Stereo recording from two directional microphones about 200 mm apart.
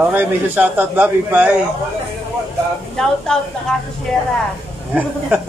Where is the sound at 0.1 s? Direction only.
10° right (ahead or behind).